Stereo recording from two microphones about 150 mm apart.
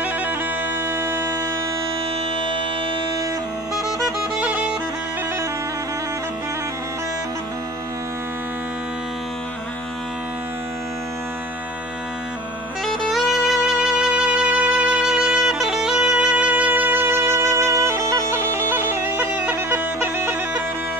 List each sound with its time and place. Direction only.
0.9 s music: 15° right (ahead or behind)
4.0 s music: 10° right (ahead or behind)
12.8 s music: centre (ahead or behind); by 18.4 s 20° right (ahead or behind)
18.7 s bagpipes: 15° right (ahead or behind)